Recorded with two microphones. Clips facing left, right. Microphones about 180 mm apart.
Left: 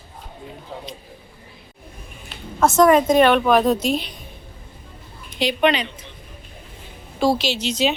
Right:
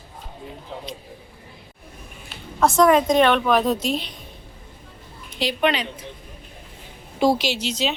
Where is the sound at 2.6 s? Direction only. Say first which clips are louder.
Left 2 dB; centre (ahead or behind).